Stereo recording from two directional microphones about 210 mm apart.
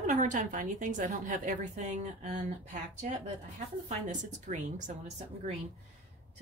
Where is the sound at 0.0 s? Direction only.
35° right (ahead or behind).